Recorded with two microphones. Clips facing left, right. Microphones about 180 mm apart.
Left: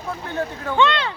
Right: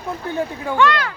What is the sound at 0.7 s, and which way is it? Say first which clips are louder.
Speech: right 1 dB; 25° left (ahead or behind).